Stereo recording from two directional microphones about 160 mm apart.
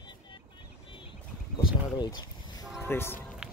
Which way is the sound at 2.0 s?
25° left (ahead or behind).